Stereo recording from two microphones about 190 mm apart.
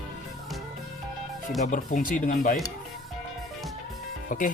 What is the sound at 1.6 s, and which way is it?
Speech, 45° left (ahead or behind).